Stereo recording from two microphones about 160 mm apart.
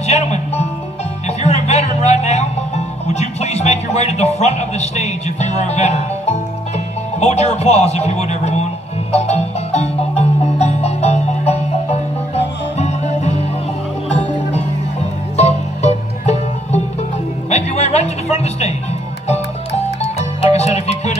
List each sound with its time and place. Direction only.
0.0 s music: 40° left (ahead or behind)
3.1 s speech: 45° left (ahead or behind)
9.1 s music: 40° left (ahead or behind)
15.3 s music: 45° left (ahead or behind)